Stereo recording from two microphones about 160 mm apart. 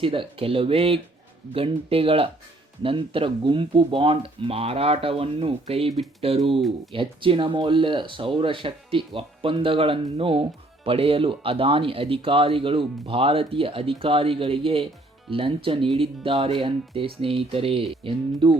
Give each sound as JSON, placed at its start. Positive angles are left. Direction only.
{"t": 0.0, "sound": "speech", "side_deg": -35}